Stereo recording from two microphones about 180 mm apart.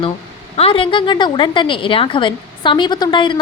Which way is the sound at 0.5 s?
30° left (ahead or behind).